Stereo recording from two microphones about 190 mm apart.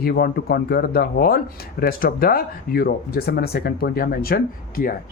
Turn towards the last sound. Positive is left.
turn(degrees=50)  # may be behind; listen again after turning